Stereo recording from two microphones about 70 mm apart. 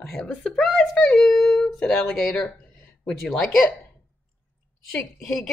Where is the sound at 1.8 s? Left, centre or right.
Centre.